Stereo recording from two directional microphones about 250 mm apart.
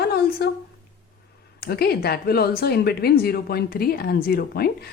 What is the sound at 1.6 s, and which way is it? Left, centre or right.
Speech, left.